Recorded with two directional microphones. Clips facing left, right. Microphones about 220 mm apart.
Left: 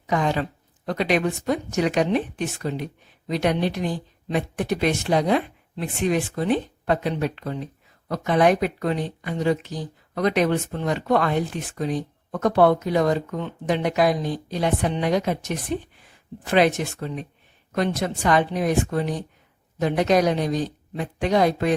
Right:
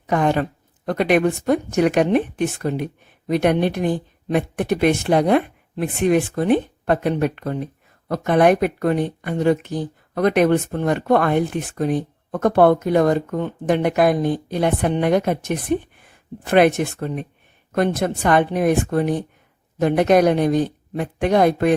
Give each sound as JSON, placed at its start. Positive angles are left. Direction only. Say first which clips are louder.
{"t": 0.1, "sound": "a woman's voice", "louder": "right 4 dB", "side_deg": -55}